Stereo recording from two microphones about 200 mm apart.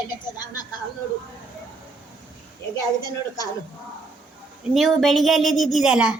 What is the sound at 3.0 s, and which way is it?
Speech, 20° left (ahead or behind).